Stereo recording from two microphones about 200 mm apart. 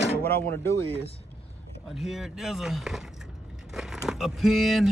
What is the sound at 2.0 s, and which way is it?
Speech, centre (ahead or behind).